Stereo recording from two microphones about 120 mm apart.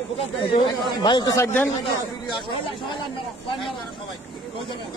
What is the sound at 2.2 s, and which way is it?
Speech, 40° left (ahead or behind).